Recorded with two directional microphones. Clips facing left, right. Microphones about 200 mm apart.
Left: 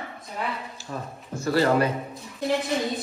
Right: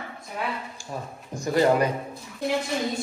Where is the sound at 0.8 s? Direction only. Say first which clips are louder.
Even; 15° right (ahead or behind).